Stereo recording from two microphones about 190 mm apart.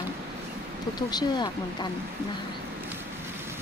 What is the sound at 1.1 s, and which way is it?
Speech, 25° left (ahead or behind).